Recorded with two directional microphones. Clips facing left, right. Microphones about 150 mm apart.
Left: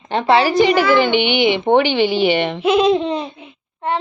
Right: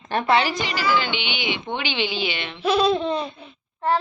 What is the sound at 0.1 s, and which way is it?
Child singing, 25° left (ahead or behind).